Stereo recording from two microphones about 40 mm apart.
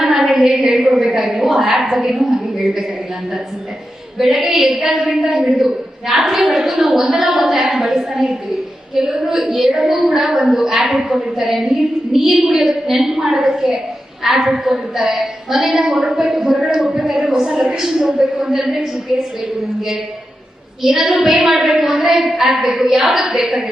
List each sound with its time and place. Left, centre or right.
0.0 s a sound: centre
0.9 s a woman's voice: centre
4.2 s a woman's voice: centre
9.7 s a woman's voice: right
10.1 s a woman's voice: centre
16.8 s a woman's voice: right
17.1 s a woman's voice: centre
20.8 s a woman's voice: centre